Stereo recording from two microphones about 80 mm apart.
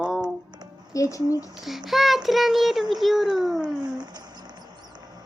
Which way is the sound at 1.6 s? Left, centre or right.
Centre.